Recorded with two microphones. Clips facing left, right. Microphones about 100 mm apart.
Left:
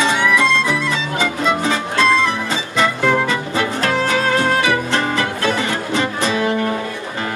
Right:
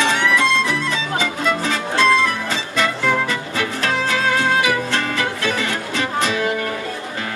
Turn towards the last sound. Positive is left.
turn(degrees=25)  # may be behind; listen again after turning